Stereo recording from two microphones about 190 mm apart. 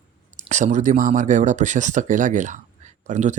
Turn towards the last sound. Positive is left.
turn(degrees=-40)  # may be behind; listen again after turning